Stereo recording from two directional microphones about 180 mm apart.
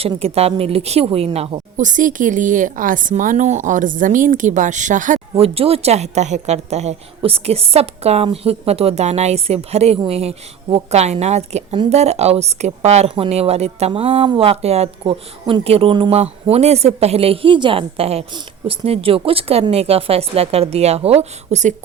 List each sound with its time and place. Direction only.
0.0 s a woman's voice: 35° right (ahead or behind)